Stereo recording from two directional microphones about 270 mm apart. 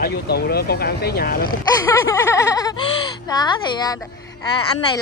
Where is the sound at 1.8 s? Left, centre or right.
Centre.